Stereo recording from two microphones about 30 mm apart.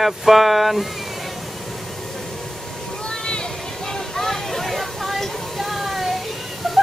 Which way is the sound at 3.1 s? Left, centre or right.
Left.